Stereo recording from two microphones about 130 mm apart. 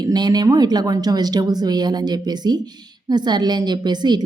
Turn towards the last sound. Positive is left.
turn(degrees=-35)  # may be behind; listen again after turning